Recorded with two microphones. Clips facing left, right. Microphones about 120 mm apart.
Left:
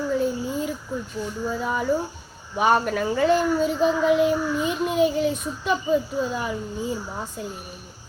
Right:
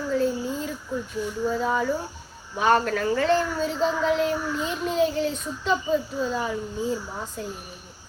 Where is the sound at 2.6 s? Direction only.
10° left (ahead or behind).